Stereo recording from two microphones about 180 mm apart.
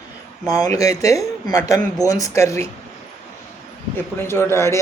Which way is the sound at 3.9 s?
15° left (ahead or behind).